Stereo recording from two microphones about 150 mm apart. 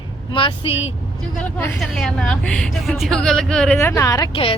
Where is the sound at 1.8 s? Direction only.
Centre (ahead or behind).